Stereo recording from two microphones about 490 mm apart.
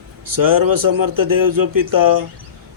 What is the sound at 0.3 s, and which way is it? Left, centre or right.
Speech, right.